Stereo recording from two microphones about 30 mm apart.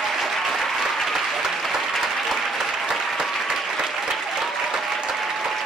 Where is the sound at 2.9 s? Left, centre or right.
Centre.